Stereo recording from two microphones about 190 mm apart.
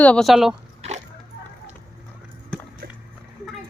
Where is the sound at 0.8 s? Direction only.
35° right (ahead or behind).